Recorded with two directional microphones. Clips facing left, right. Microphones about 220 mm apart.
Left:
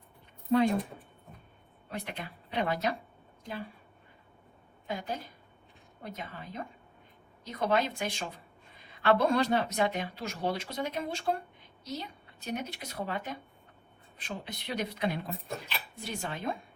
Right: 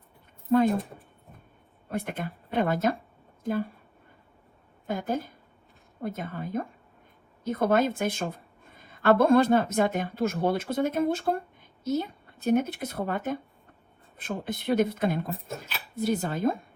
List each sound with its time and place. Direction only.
0.5 s a woman's voice: 50° right (ahead or behind)
1.9 s a woman's voice: 50° right (ahead or behind)
4.9 s a woman's voice: 50° right (ahead or behind)